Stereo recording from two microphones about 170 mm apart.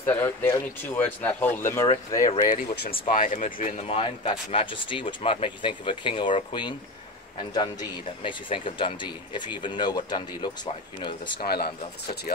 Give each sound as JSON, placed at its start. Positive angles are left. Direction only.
{"t": 0.0, "sound": "speech", "side_deg": 15}
{"t": 2.7, "sound": "speech", "side_deg": 75}
{"t": 3.1, "sound": "speech", "side_deg": 50}
{"t": 3.8, "sound": "speech", "side_deg": 35}
{"t": 8.2, "sound": "speech", "side_deg": 30}
{"t": 11.4, "sound": "speech", "side_deg": 65}